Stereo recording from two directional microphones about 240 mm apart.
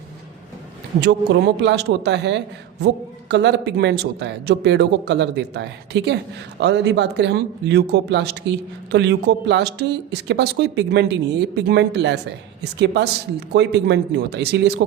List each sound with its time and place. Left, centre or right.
1.6 s speech: right